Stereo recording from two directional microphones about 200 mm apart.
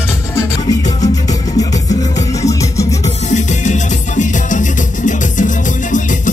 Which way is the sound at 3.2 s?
35° left (ahead or behind).